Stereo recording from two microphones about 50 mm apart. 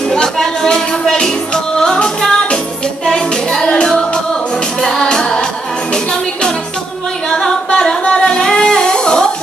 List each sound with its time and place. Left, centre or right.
0.1 s music: centre
7.2 s singing: centre